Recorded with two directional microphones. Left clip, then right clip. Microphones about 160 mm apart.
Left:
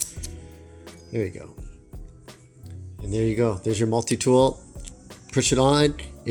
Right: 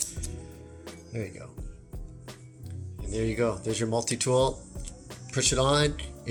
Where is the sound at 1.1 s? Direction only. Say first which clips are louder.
Left 10 dB; 50° left (ahead or behind).